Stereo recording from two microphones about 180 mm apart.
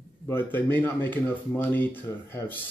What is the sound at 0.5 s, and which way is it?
Speech, 10° left (ahead or behind).